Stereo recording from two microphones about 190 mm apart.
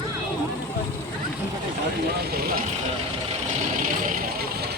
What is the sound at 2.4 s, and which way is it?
Speech, 50° right (ahead or behind).